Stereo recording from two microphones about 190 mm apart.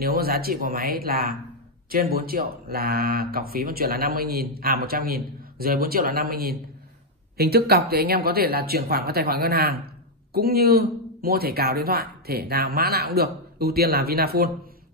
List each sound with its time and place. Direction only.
0.0 s speech: 55° right (ahead or behind)